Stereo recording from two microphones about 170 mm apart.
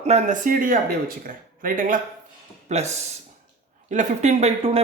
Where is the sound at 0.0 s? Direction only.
40° right (ahead or behind).